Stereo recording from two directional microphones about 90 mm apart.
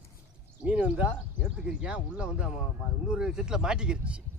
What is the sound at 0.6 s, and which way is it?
Speech, 15° right (ahead or behind).